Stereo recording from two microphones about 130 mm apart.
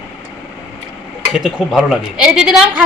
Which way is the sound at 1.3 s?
5° right (ahead or behind).